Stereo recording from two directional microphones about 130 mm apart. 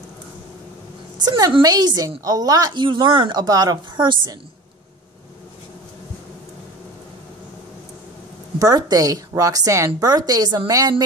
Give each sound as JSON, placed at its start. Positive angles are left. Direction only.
{"t": 1.2, "sound": "a woman's voice", "side_deg": -30}
{"t": 8.5, "sound": "a woman's voice", "side_deg": -30}